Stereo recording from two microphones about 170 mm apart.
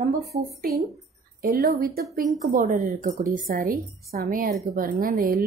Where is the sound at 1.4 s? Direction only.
60° right (ahead or behind).